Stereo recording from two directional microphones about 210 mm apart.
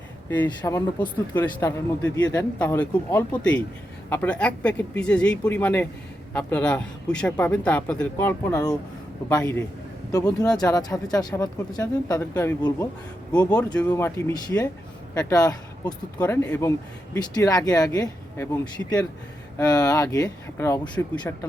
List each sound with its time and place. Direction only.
0.4 s speech: 15° left (ahead or behind)
19.5 s speech: 15° left (ahead or behind)